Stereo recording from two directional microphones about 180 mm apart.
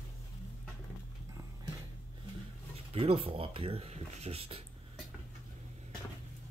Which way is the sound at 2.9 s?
30° right (ahead or behind).